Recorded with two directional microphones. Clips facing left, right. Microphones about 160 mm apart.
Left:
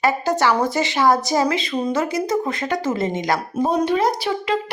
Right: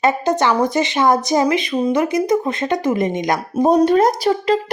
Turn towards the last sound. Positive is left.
turn(degrees=-40)  # may be behind; listen again after turning